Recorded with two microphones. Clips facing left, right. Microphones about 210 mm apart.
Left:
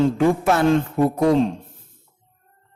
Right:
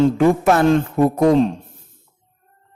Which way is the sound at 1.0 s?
50° right (ahead or behind).